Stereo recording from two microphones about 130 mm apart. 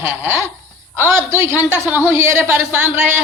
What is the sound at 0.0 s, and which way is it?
Speech, 15° right (ahead or behind).